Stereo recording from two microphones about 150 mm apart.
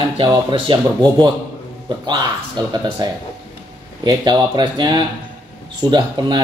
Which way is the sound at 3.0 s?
30° right (ahead or behind).